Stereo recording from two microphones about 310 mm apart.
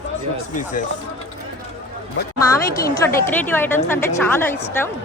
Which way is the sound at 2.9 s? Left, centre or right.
Centre.